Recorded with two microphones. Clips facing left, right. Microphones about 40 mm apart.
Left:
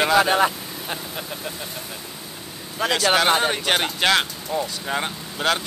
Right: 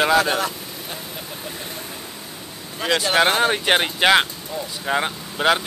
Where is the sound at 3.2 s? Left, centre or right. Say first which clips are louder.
Right 2 dB; centre.